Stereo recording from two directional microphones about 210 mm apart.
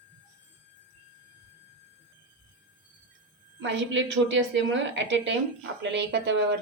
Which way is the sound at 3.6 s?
60° right (ahead or behind).